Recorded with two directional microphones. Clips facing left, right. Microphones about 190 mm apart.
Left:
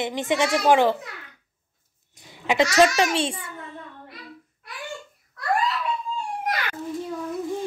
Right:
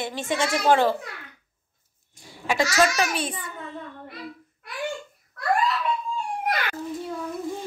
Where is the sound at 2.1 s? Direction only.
20° left (ahead or behind).